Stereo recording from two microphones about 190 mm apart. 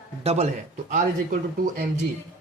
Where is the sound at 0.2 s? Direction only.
30° right (ahead or behind).